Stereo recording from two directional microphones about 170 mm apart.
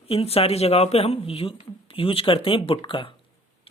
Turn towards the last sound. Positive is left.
turn(degrees=30)  # may be behind; listen again after turning